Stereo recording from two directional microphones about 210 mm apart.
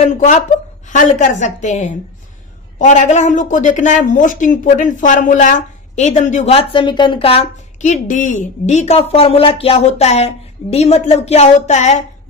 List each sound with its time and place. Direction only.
0.0 s speech: 35° left (ahead or behind)